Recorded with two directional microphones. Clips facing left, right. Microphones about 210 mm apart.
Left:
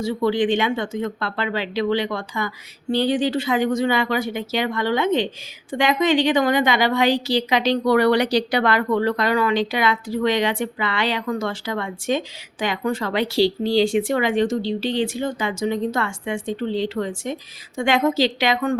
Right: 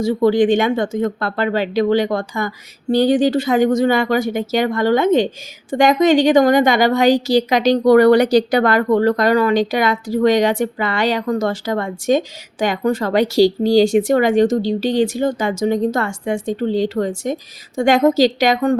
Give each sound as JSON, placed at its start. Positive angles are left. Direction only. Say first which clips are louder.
{"t": 0.0, "sound": "a woman's voice", "louder": "right 6 dB", "side_deg": -45}